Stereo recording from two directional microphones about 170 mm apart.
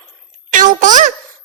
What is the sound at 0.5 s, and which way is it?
Speech, 50° right (ahead or behind).